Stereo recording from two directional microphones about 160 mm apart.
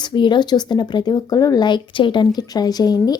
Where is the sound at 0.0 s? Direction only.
30° left (ahead or behind).